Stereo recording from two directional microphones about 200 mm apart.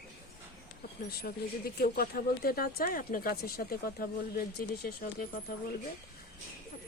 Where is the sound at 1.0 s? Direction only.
50° left (ahead or behind).